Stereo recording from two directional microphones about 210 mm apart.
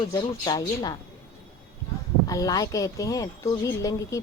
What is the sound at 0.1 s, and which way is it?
Speech, 20° left (ahead or behind).